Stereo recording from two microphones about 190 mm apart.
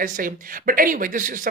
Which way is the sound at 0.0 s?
45° right (ahead or behind).